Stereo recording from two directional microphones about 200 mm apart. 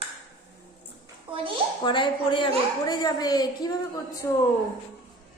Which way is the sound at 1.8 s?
25° left (ahead or behind).